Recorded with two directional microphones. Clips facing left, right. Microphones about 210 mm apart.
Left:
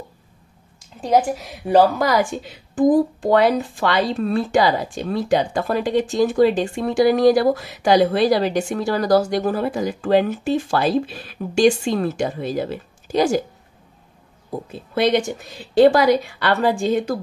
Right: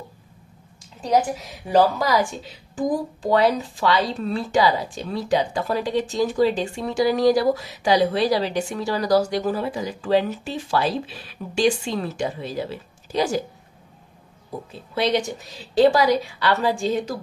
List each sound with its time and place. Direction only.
1.7 s speech: 55° left (ahead or behind)
15.0 s speech: 55° left (ahead or behind)